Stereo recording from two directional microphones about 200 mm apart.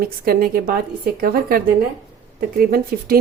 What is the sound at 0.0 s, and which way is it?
Speech, 50° right (ahead or behind).